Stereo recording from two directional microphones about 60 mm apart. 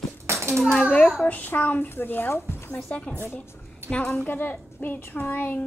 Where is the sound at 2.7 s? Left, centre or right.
Left.